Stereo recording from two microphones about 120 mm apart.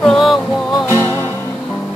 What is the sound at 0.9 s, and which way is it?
Music, 25° right (ahead or behind).